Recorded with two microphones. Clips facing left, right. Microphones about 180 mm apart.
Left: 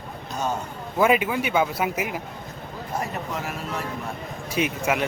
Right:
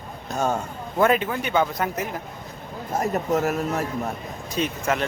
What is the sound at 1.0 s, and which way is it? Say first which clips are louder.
A man's voice: even; 10° left (ahead or behind).